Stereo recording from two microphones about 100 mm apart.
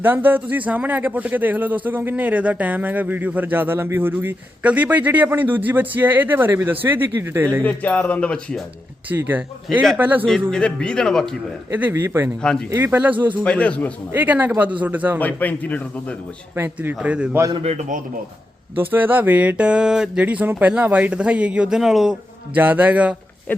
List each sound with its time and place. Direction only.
0.0 s a man's voice: 20° right (ahead or behind)
7.6 s speech: 15° left (ahead or behind)
9.0 s a man's voice: 20° right (ahead or behind)
10.5 s speech: 10° left (ahead or behind)
11.7 s speech: 20° right (ahead or behind)
12.4 s speech: 10° left (ahead or behind)
12.7 s a man's voice: 20° right (ahead or behind)
13.4 s speech: 10° left (ahead or behind)
14.1 s a man's voice: 15° right (ahead or behind)
15.2 s speech: 15° left (ahead or behind)
16.6 s a man's voice: 20° right (ahead or behind)
18.8 s a man's voice: 20° right (ahead or behind)
23.5 s speech: 20° left (ahead or behind)